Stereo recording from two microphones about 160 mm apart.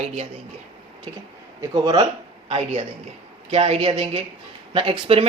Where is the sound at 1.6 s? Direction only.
25° right (ahead or behind).